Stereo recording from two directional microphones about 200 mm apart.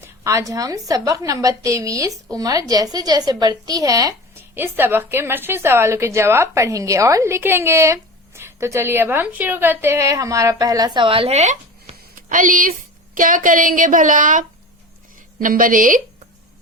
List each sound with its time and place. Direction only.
0.0 s a woman's voice: 15° right (ahead or behind); by 16.0 s 40° right (ahead or behind)